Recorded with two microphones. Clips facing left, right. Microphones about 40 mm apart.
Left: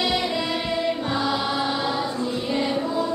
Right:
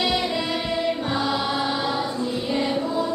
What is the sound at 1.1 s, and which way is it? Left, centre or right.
Music, centre.